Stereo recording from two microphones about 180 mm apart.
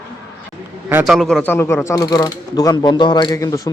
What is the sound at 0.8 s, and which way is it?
Speech, 5° right (ahead or behind).